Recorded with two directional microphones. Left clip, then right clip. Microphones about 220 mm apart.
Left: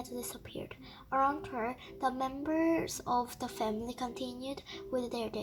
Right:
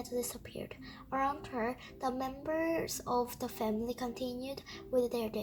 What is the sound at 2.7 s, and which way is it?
Speech, 30° left (ahead or behind).